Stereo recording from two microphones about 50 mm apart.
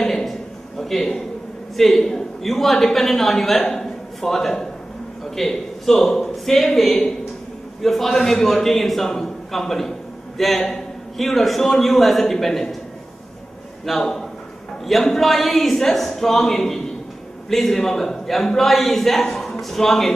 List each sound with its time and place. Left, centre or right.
0.0 s a sound: centre
1.8 s a man's voice: centre
13.8 s a man's voice: centre